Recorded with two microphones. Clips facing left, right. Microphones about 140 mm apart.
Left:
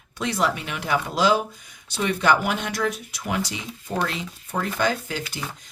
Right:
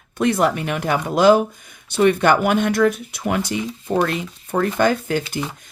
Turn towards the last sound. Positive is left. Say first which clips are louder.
# right 6 dB
turn(degrees=-55)  # may be behind; listen again after turning